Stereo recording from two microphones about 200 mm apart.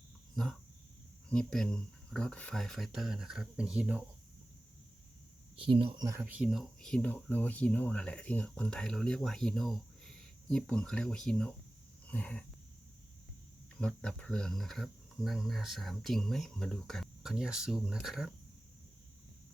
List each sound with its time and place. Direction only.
1.3 s speech: 5° left (ahead or behind)
5.5 s speech: 25° right (ahead or behind)
6.1 s speech: 10° right (ahead or behind)
12.0 s a sound: 5° left (ahead or behind)
13.7 s speech: 5° left (ahead or behind)